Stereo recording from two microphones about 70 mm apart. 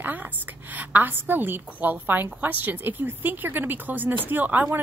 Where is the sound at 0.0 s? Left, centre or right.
Right.